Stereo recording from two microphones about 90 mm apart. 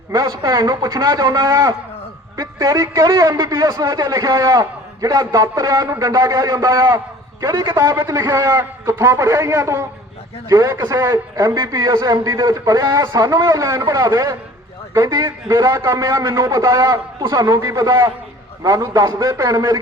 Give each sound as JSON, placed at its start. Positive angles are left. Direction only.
{"t": 0.6, "sound": "a man's voice", "side_deg": -40}
{"t": 7.5, "sound": "a man's voice", "side_deg": -55}
{"t": 7.8, "sound": "a man's voice", "side_deg": -35}
{"t": 8.3, "sound": "a man's voice", "side_deg": -45}
{"t": 8.5, "sound": "a man's voice", "side_deg": -35}
{"t": 10.9, "sound": "a man's voice", "side_deg": -30}
{"t": 11.3, "sound": "a man's voice", "side_deg": -50}